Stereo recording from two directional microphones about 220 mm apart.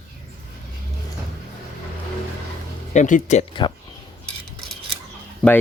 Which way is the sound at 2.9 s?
35° left (ahead or behind).